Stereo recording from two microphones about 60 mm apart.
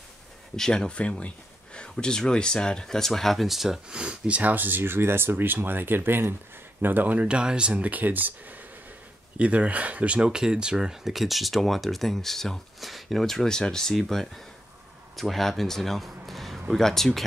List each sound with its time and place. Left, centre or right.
0.6 s speech: centre; by 7.2 s right
7.2 s speech: centre